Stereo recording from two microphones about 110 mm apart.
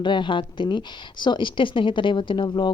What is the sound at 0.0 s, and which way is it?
Speech, 45° left (ahead or behind).